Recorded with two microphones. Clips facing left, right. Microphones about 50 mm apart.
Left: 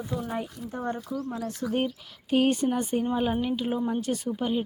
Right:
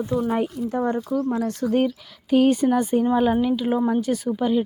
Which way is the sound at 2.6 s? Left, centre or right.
Right.